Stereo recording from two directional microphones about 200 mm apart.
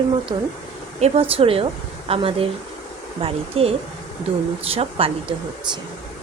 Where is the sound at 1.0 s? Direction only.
30° right (ahead or behind).